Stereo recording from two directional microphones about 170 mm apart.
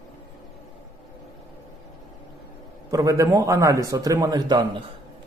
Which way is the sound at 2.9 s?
20° right (ahead or behind).